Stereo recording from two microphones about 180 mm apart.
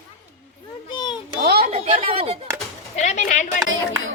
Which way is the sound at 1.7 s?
35° right (ahead or behind).